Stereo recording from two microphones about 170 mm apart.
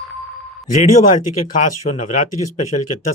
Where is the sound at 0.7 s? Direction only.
45° left (ahead or behind).